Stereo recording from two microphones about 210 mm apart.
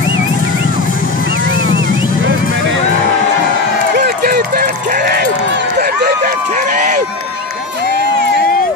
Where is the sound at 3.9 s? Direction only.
50° right (ahead or behind).